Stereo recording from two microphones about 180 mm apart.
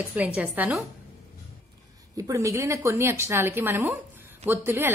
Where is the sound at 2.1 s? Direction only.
15° right (ahead or behind).